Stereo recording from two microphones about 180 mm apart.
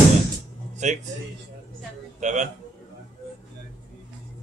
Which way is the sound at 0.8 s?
40° right (ahead or behind).